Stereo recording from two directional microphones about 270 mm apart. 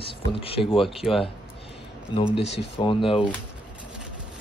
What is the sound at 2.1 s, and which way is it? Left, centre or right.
Speech, centre.